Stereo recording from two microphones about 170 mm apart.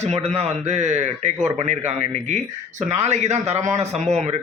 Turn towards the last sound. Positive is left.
turn(degrees=-40)  # may be behind; listen again after turning